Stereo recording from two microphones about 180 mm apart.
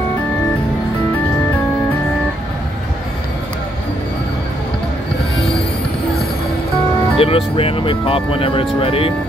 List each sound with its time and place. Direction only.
7.2 s speech: 30° left (ahead or behind)